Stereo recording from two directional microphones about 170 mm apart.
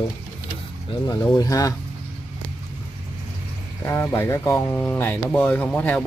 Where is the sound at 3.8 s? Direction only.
15° left (ahead or behind).